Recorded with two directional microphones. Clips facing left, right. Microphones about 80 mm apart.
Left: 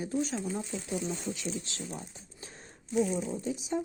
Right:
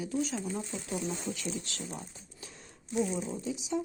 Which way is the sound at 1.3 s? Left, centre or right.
Left.